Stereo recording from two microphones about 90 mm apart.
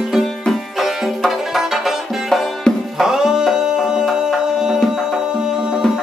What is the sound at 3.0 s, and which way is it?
Music, 5° right (ahead or behind).